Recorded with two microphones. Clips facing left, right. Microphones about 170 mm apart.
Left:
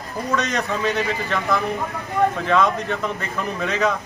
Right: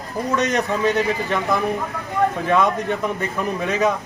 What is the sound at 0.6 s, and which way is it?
A man's voice, 20° right (ahead or behind).